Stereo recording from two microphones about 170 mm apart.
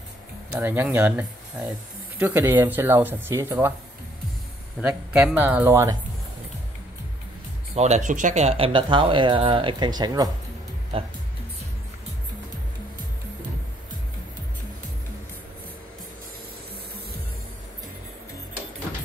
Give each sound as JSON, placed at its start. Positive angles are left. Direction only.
{"t": 0.6, "sound": "speech", "side_deg": -10}
{"t": 4.8, "sound": "speech", "side_deg": -10}
{"t": 7.7, "sound": "speech", "side_deg": -40}